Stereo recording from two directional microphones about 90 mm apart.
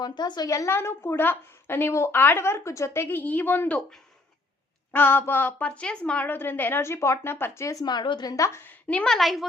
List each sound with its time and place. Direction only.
0.0 s a woman's voice: 50° left (ahead or behind)
0.5 s a woman's voice: 30° left (ahead or behind)
4.9 s a woman's voice: 20° left (ahead or behind); by 8.3 s 55° left (ahead or behind)
8.3 s a woman's voice: 35° left (ahead or behind)
8.6 s a woman's voice: 15° left (ahead or behind)
9.0 s a woman's voice: centre (ahead or behind)